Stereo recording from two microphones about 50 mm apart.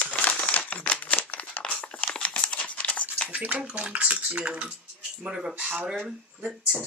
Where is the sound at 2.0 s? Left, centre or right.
Left.